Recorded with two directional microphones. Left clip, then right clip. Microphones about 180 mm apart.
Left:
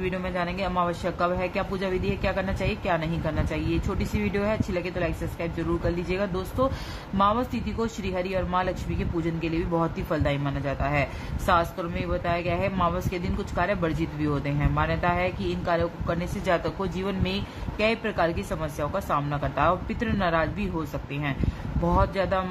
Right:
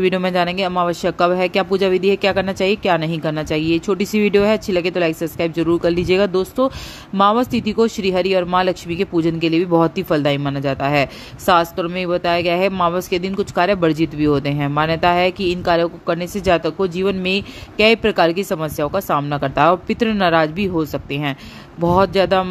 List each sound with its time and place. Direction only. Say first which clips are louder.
0.0 s speech: right 12 dB; 50° right (ahead or behind)